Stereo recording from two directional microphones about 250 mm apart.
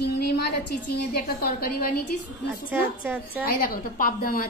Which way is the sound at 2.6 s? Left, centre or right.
Centre.